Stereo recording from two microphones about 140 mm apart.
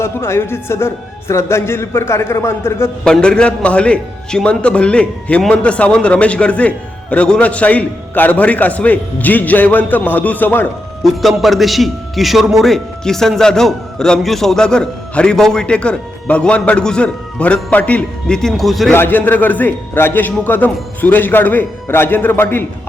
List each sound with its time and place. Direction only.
0.0 s a man's voice: 20° left (ahead or behind)
3.0 s a man's voice: 5° left (ahead or behind)
11.0 s a man's voice: centre (ahead or behind)
18.9 s a man's voice: 15° left (ahead or behind)